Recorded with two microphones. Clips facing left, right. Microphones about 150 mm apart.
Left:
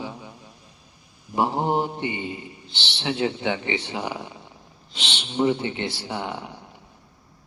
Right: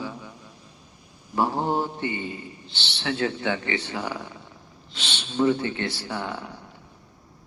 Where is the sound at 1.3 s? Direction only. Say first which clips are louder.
Left 1 dB; 20° left (ahead or behind).